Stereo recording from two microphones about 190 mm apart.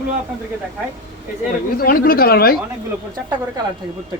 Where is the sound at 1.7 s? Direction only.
50° left (ahead or behind).